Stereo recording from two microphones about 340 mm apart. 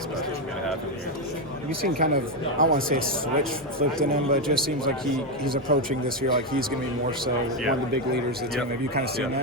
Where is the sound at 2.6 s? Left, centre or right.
Right.